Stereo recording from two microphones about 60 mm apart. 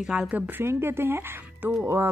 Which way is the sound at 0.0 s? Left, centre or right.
Centre.